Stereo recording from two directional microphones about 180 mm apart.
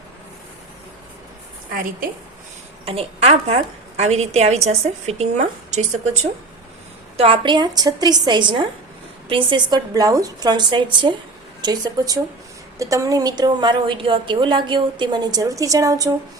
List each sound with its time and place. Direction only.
2.8 s a woman's voice: 30° right (ahead or behind)